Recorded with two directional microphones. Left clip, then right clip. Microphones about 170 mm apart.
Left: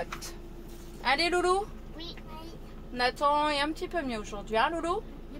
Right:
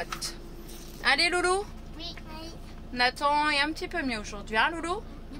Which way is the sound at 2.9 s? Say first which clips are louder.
Right 1 dB; 25° left (ahead or behind).